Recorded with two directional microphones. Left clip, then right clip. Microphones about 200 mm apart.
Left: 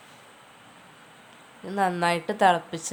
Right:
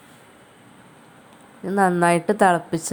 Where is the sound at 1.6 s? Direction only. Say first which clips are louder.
Right 6 dB; 15° right (ahead or behind).